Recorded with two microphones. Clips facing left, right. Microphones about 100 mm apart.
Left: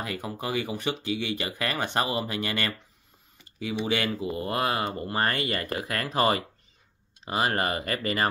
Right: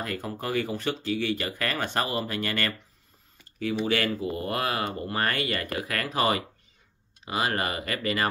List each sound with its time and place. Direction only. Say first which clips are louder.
0.0 s speech: even; 15° left (ahead or behind); by 8.3 s 35° left (ahead or behind)